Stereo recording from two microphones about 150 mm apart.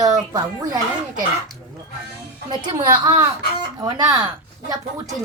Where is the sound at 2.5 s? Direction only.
30° right (ahead or behind).